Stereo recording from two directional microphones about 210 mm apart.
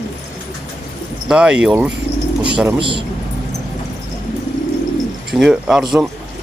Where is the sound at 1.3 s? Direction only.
5° right (ahead or behind).